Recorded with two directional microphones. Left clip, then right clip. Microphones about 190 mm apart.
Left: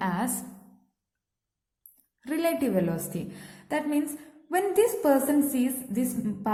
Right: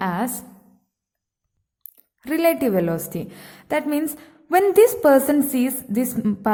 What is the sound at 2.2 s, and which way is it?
A woman's voice, 35° right (ahead or behind).